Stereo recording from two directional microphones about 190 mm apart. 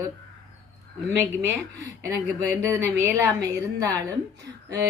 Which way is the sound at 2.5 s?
15° right (ahead or behind).